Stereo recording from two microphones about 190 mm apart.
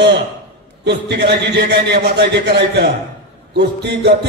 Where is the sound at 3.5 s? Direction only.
65° right (ahead or behind).